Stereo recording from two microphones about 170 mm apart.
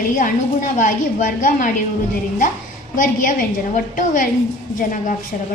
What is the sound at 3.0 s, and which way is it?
A woman's voice, 50° left (ahead or behind).